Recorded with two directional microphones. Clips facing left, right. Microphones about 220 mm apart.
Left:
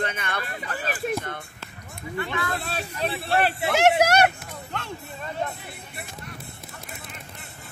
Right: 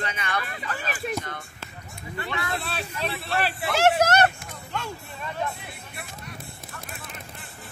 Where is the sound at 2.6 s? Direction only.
45° left (ahead or behind).